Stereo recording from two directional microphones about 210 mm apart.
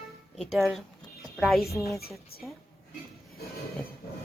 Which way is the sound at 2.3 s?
45° left (ahead or behind).